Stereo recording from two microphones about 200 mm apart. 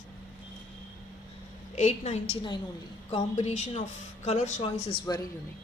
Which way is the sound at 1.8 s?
35° left (ahead or behind).